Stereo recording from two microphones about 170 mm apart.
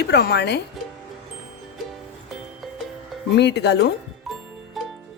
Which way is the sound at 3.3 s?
80° left.